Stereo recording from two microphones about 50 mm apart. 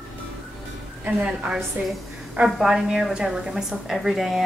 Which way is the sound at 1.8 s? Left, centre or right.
Right.